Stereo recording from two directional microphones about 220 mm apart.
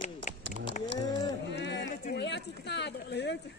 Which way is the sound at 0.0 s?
35° left (ahead or behind).